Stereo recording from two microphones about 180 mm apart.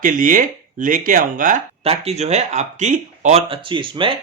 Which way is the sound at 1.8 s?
35° right (ahead or behind).